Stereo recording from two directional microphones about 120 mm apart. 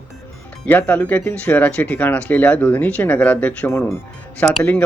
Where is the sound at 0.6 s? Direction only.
10° left (ahead or behind).